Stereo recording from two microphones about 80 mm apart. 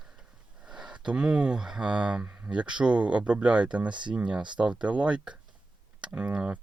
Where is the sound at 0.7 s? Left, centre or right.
Centre.